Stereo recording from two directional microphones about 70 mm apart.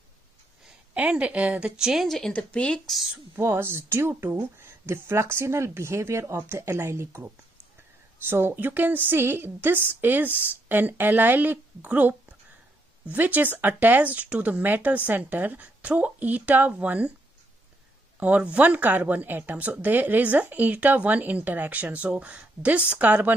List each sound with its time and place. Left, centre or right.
0.9 s speech: centre
1.8 s speech: centre
2.0 s speech: centre
3.3 s speech: right
8.3 s speech: right
18.2 s speech: centre